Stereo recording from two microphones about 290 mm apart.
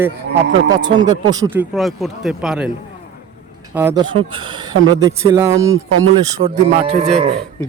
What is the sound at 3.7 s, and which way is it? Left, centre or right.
Speech, centre.